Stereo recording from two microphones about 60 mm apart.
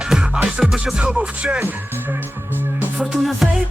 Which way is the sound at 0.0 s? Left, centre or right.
Centre.